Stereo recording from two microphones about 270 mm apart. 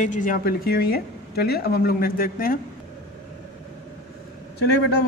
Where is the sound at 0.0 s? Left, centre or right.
Left.